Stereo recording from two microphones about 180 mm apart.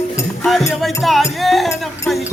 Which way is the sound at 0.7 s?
Centre (ahead or behind).